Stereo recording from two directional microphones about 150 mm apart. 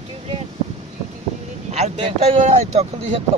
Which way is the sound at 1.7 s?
45° right (ahead or behind).